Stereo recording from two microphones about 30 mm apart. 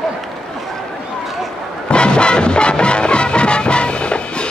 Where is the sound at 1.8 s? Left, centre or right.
Left.